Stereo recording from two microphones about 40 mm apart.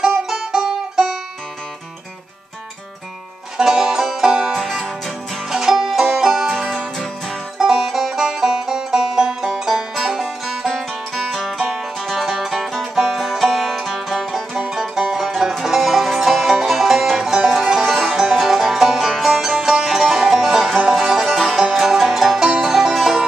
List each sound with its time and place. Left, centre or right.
0.0 s music: centre
3.5 s music: centre
5.5 s music: centre
7.5 s music: centre
10.7 s music: centre